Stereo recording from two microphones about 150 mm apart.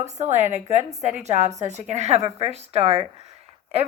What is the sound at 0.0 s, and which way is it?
A woman's voice, 50° right (ahead or behind).